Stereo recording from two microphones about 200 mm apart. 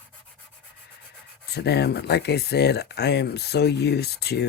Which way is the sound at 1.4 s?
55° left (ahead or behind).